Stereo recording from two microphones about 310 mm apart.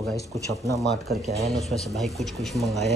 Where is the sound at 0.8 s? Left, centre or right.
Right.